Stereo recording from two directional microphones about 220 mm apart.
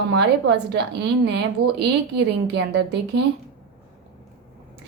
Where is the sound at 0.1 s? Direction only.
50° right (ahead or behind).